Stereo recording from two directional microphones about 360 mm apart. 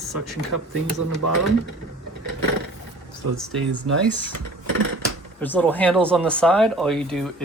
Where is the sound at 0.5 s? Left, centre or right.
Right.